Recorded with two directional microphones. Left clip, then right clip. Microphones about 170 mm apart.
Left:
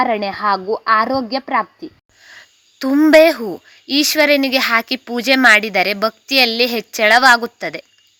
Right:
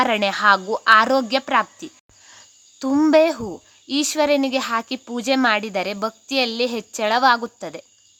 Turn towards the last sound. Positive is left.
turn(degrees=15)  # may be behind; listen again after turning